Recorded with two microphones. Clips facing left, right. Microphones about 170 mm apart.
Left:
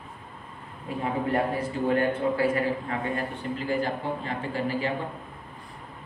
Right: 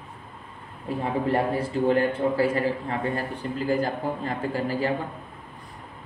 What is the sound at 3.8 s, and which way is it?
A man's voice, 40° right (ahead or behind).